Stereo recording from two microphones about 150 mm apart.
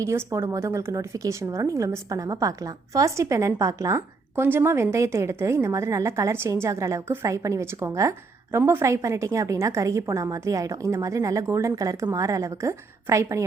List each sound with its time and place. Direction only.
0.0 s a woman's voice: 20° right (ahead or behind)